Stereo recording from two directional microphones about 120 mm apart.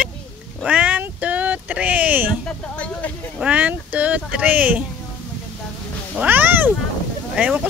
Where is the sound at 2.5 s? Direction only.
10° left (ahead or behind).